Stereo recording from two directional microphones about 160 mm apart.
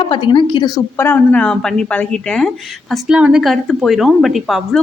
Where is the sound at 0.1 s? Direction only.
30° left (ahead or behind).